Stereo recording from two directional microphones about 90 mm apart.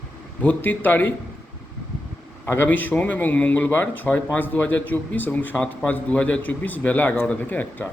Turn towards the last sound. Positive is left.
turn(degrees=20)  # may be behind; listen again after turning